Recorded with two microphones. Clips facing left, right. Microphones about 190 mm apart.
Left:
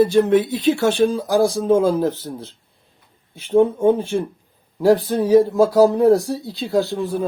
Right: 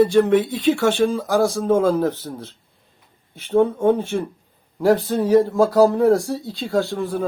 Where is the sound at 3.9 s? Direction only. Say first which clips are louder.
Left 1 dB; centre (ahead or behind).